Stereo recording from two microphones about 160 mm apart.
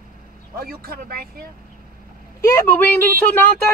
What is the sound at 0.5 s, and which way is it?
Speech, 70° right (ahead or behind).